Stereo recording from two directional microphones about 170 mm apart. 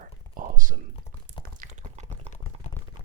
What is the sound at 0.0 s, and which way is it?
Whispering, 55° right (ahead or behind).